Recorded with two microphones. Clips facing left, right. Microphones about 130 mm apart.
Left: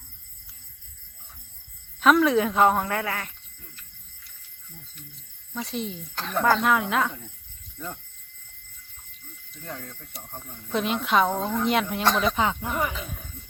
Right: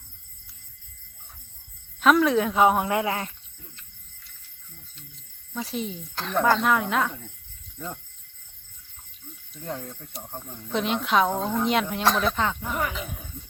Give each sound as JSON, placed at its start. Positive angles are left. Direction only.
{"t": 2.0, "sound": "speech", "side_deg": 0}
{"t": 5.5, "sound": "speech", "side_deg": 0}
{"t": 9.6, "sound": "speech", "side_deg": -25}
{"t": 10.1, "sound": "speech", "side_deg": 0}
{"t": 12.4, "sound": "speech", "side_deg": 15}
{"t": 12.9, "sound": "speech", "side_deg": 0}